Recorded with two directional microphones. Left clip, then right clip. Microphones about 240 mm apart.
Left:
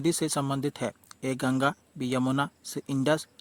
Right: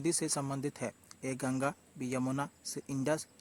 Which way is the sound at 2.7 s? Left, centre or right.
Left.